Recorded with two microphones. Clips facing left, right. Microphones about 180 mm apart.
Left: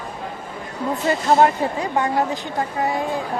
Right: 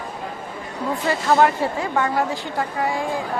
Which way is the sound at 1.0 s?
20° left (ahead or behind).